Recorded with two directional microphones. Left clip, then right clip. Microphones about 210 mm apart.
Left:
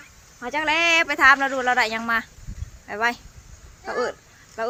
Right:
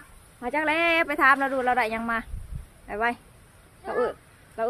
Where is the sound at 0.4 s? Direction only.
5° right (ahead or behind).